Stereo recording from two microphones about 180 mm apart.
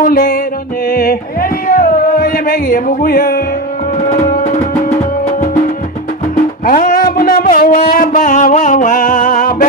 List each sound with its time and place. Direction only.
0.0 s music: 55° left (ahead or behind)
1.7 s music: 50° left (ahead or behind)
4.3 s music: 40° left (ahead or behind)
6.6 s speech: 50° left (ahead or behind)